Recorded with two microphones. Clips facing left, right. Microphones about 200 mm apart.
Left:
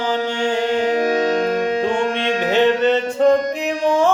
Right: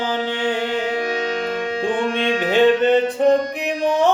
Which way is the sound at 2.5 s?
15° right (ahead or behind).